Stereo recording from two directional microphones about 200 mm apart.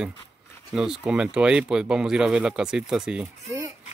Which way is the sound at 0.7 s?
5° right (ahead or behind).